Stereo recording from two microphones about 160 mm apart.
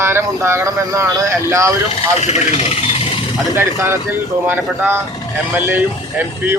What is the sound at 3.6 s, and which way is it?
Speech, 15° right (ahead or behind).